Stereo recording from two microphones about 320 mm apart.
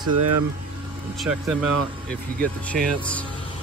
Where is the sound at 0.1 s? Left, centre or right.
Right.